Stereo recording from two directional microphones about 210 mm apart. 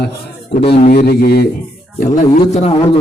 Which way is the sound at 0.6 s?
25° left (ahead or behind).